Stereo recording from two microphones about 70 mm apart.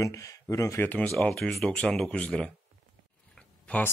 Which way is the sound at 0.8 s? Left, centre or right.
Left.